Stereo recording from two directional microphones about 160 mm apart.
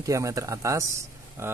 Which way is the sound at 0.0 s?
20° right (ahead or behind).